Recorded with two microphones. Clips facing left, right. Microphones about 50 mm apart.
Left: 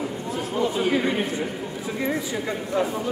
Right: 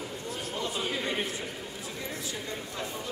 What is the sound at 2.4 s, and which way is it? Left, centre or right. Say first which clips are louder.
Speech: left 12 dB; left.